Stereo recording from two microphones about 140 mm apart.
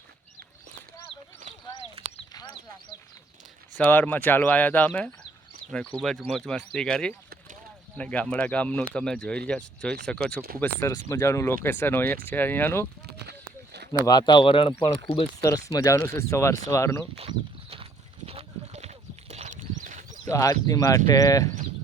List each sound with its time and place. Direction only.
3.8 s speech: 10° left (ahead or behind)
14.0 s speech: 30° left (ahead or behind)
15.4 s speech: 25° left (ahead or behind)
17.2 s a sound: 40° right (ahead or behind)
19.3 s a sound: 55° right (ahead or behind)
20.2 s speech: 25° left (ahead or behind)